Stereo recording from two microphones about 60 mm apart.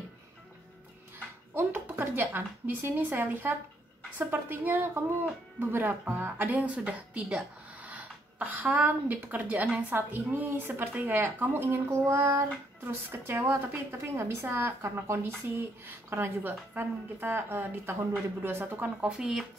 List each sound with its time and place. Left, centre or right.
1.5 s a woman's voice: right
6.5 s a woman's voice: right
12.8 s a woman's voice: right
18.9 s speech: centre